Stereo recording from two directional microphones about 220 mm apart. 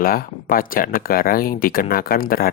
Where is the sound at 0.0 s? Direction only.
40° left (ahead or behind).